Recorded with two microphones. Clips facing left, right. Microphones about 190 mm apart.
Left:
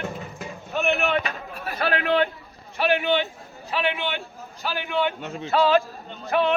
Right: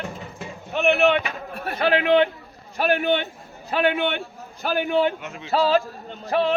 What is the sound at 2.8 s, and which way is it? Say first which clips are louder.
A man's voice: right 1 dB; 45° right (ahead or behind).